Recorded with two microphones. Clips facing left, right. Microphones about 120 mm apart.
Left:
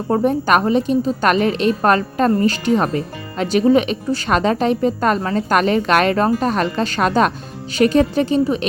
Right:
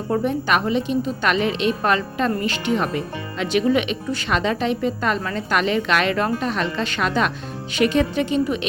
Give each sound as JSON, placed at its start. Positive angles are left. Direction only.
{"t": 0.1, "sound": "a woman's voice", "side_deg": 40}